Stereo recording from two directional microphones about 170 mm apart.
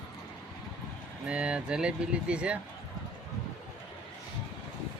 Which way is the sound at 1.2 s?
5° right (ahead or behind).